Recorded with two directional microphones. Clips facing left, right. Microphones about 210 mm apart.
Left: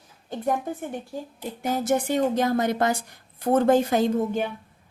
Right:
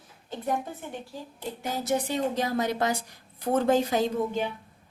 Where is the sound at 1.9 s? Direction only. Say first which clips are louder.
Left 4 dB; 50° left (ahead or behind).